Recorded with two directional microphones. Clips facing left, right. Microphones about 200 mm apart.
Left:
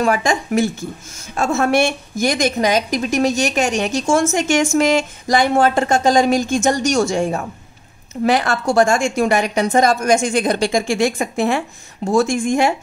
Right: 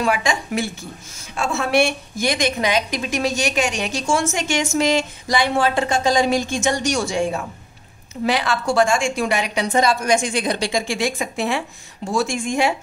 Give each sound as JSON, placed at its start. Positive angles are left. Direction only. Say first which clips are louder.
{"t": 0.0, "sound": "a woman's voice", "louder": "left 4 dB", "side_deg": 45}